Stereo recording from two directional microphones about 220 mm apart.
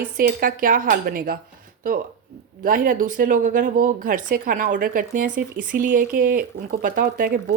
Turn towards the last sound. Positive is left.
turn(degrees=-40)  # may be behind; listen again after turning